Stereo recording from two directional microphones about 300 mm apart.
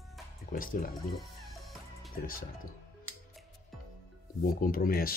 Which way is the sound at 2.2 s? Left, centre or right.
Left.